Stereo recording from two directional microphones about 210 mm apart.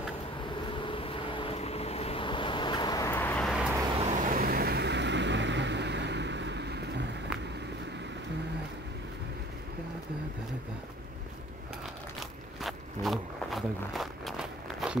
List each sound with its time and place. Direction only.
0.7 s vehicle: 25° left (ahead or behind); by 3.7 s centre (ahead or behind)
4.0 s vehicle: 40° right (ahead or behind)
12.2 s a sound: centre (ahead or behind)